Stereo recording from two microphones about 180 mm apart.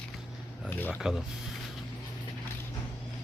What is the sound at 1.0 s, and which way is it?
Speech, centre (ahead or behind).